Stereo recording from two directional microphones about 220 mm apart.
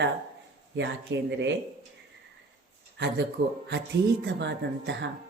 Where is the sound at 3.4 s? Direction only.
55° right (ahead or behind).